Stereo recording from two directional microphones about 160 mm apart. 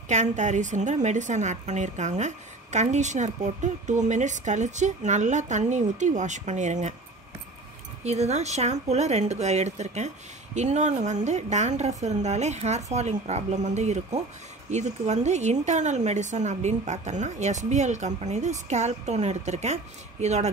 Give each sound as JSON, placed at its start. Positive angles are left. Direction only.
{"t": 0.1, "sound": "a woman's voice", "side_deg": -45}
{"t": 8.0, "sound": "a woman's voice", "side_deg": -45}